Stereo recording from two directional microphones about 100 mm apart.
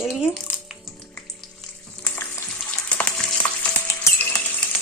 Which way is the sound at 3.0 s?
15° left (ahead or behind).